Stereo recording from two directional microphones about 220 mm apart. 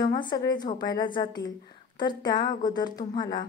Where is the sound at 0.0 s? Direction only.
20° left (ahead or behind).